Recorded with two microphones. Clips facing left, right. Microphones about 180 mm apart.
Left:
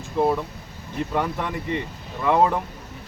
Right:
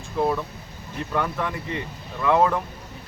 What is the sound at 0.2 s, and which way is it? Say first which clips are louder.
Speech: left 2 dB; 20° left (ahead or behind).